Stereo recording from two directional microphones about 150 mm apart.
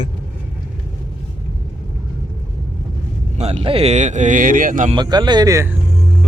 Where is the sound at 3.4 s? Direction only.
40° right (ahead or behind); by 4.9 s 60° right (ahead or behind).